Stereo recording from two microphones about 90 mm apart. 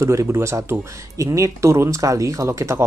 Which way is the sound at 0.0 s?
35° right (ahead or behind).